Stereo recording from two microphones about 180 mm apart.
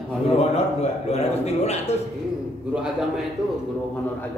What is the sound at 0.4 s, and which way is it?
Music, 35° left (ahead or behind).